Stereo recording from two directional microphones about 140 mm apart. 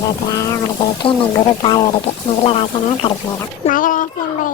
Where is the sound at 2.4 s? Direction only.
40° left (ahead or behind).